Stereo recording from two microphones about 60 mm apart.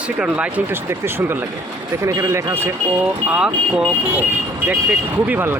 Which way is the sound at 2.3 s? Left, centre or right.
Right.